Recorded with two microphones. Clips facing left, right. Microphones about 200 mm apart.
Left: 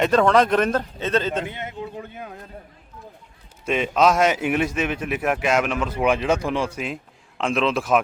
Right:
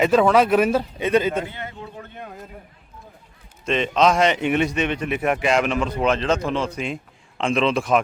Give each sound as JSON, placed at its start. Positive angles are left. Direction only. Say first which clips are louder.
{"t": 0.0, "sound": "a man's voice", "louder": "right 1 dB", "side_deg": -5}
{"t": 1.5, "sound": "a man's voice", "louder": "left 3 dB", "side_deg": 20}
{"t": 2.1, "sound": "a man's voice", "louder": "even", "side_deg": 0}
{"t": 3.7, "sound": "a man's voice", "louder": "even", "side_deg": 5}